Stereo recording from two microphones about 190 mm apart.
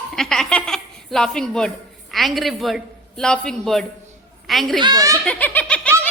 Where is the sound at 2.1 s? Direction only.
Centre (ahead or behind).